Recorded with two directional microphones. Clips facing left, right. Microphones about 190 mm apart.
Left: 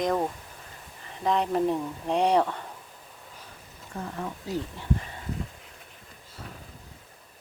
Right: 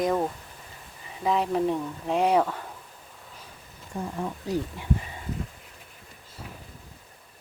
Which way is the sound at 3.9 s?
10° right (ahead or behind).